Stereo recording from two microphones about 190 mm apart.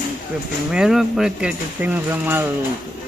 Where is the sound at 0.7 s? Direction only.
Centre (ahead or behind).